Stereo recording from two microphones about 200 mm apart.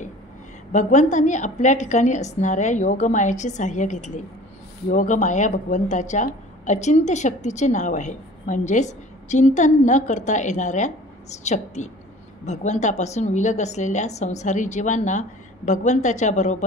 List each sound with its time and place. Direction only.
0.7 s speech: 35° left (ahead or behind)